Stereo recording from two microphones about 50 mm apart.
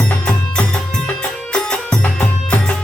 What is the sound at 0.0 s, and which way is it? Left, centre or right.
Music, centre.